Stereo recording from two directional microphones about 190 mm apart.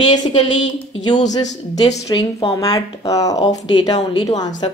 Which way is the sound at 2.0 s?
20° left (ahead or behind).